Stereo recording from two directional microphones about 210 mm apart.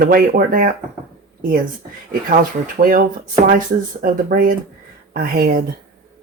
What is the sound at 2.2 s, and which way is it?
Speech, 45° right (ahead or behind).